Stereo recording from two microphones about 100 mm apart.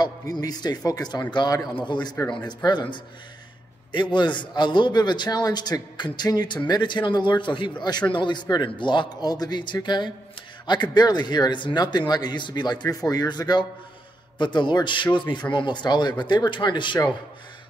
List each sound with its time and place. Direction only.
0.0 s a man's voice: 40° left (ahead or behind)